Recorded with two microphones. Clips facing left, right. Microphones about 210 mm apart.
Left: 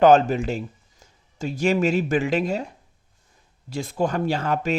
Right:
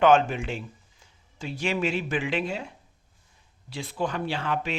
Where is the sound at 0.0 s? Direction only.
40° left (ahead or behind).